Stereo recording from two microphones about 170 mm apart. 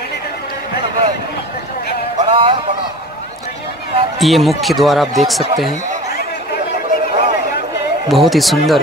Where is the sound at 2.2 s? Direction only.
30° right (ahead or behind).